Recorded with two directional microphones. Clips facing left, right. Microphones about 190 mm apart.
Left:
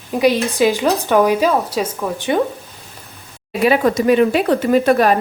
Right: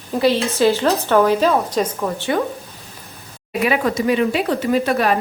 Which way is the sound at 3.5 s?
35° left (ahead or behind).